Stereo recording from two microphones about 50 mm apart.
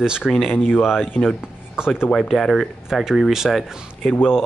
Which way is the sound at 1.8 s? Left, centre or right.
Centre.